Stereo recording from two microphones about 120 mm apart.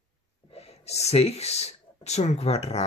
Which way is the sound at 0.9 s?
65° left (ahead or behind).